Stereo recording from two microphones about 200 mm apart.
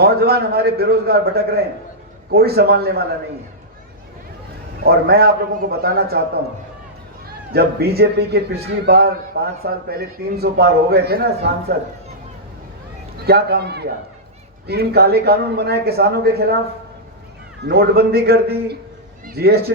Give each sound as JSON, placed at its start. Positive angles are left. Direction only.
{"t": 0.0, "sound": "a man's voice", "side_deg": -50}
{"t": 4.8, "sound": "a man's voice", "side_deg": -50}
{"t": 7.5, "sound": "a man's voice", "side_deg": -50}
{"t": 13.2, "sound": "a man's voice", "side_deg": -55}
{"t": 17.6, "sound": "a man's voice", "side_deg": -50}